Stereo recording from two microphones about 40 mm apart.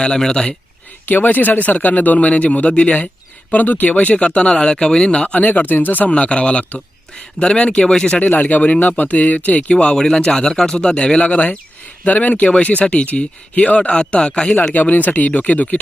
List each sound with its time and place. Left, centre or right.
0.0 s speech: centre
1.0 s speech: left
3.5 s speech: left
5.2 s speech: left
6.1 s speech: left
8.2 s speech: left
9.8 s speech: left
14.7 s speech: left